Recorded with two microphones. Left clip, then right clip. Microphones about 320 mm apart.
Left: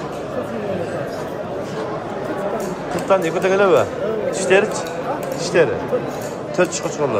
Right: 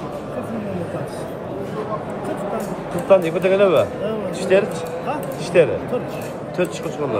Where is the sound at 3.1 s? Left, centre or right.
Centre.